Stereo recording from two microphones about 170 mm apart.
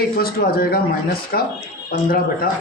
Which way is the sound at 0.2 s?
65° left (ahead or behind).